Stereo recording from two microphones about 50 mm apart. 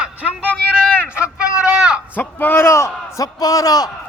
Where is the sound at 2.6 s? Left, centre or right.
Left.